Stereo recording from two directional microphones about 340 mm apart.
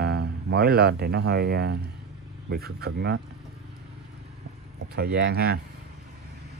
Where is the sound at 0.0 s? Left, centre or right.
Right.